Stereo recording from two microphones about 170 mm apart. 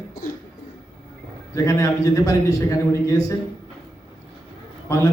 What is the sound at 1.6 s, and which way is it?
A man's voice, 20° left (ahead or behind).